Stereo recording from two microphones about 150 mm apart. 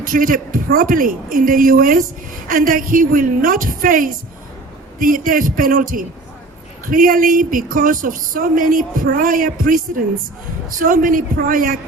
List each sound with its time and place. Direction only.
0.0 s a woman's voice: 70° right (ahead or behind)